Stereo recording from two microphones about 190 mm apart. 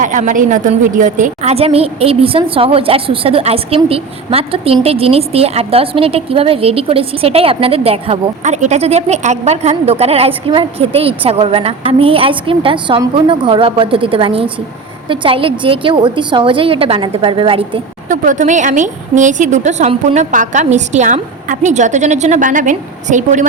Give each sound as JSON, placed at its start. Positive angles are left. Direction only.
{"t": 0.0, "sound": "a woman's voice", "side_deg": -40}
{"t": 18.1, "sound": "a woman's voice", "side_deg": -40}